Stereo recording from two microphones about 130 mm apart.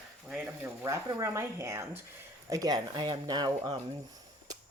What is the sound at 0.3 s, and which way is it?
Speech, 10° right (ahead or behind).